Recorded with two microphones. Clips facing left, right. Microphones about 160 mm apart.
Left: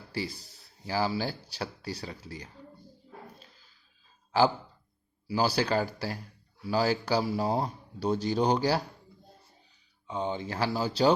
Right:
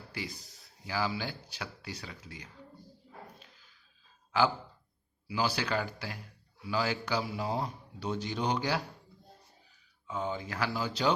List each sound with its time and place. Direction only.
0.1 s speech: 30° left (ahead or behind)
4.3 s speech: 35° left (ahead or behind)
10.1 s speech: 25° left (ahead or behind)